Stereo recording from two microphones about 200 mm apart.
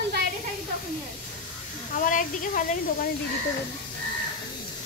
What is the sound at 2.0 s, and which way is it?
Speech, 40° left (ahead or behind).